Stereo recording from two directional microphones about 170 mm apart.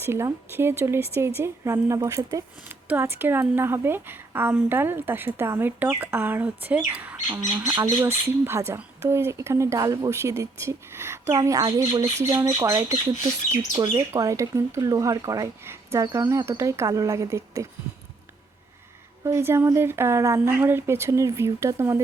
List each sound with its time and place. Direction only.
0.0 s speech: 15° right (ahead or behind)
19.2 s speech: 15° right (ahead or behind)